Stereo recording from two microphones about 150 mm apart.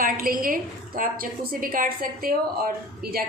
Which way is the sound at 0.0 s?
70° right (ahead or behind).